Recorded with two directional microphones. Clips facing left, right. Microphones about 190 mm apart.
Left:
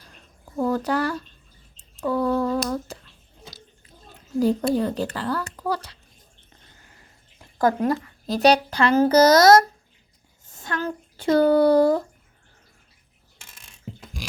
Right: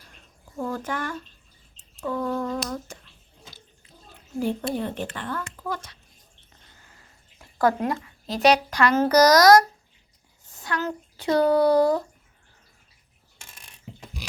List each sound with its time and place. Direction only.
0.5 s speech: 40° left (ahead or behind)
4.4 s speech: 40° left (ahead or behind)
7.7 s speech: 40° left (ahead or behind)
10.5 s a sound: 25° left (ahead or behind)
11.3 s speech: 55° left (ahead or behind)